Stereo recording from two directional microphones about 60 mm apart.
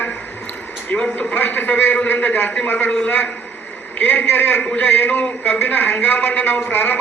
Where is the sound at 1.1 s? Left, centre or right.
Left.